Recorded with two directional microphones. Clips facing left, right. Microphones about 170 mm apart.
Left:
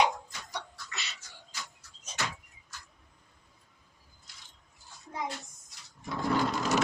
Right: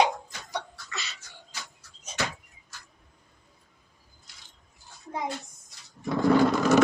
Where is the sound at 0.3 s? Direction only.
75° right (ahead or behind).